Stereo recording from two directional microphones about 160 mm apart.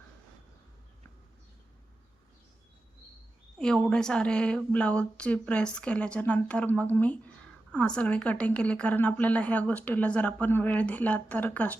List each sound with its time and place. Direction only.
3.6 s a woman's voice: 5° left (ahead or behind)